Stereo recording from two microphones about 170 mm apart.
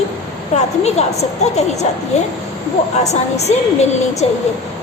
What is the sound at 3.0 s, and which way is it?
Speech, 40° left (ahead or behind).